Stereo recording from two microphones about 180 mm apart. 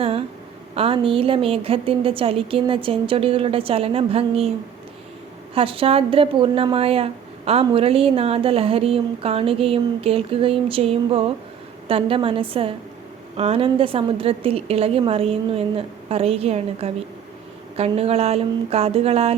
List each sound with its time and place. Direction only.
0.0 s a sound: 30° right (ahead or behind)
0.8 s a woman's voice: 30° right (ahead or behind)
5.5 s a woman's voice: 30° right (ahead or behind)